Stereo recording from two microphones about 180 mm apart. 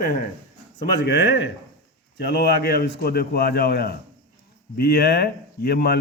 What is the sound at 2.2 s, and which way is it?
Speech, 60° left (ahead or behind).